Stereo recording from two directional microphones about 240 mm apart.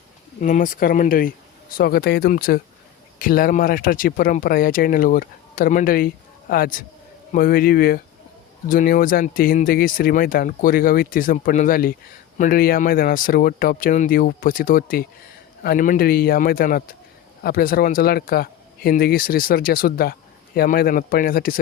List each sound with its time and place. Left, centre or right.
0.4 s speech: left